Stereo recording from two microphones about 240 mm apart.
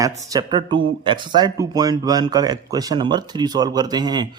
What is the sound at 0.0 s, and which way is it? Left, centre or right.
Speech, centre.